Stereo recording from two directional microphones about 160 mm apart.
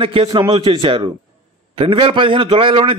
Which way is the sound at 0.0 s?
35° right (ahead or behind).